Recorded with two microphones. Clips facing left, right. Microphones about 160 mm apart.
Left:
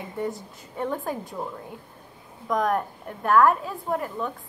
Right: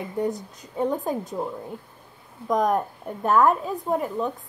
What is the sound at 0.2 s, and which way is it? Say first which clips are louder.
A woman's voice: right 3 dB; 20° right (ahead or behind).